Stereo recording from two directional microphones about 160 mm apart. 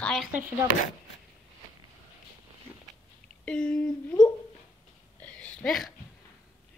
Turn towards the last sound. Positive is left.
turn(degrees=5)  # may be behind; listen again after turning